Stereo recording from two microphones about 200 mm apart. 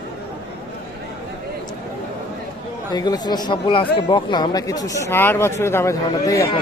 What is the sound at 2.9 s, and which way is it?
Speech, 20° left (ahead or behind).